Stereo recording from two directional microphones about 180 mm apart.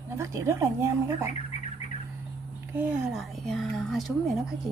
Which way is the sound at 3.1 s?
Centre (ahead or behind).